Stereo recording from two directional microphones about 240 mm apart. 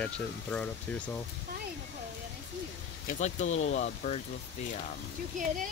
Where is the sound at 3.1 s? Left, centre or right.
Left.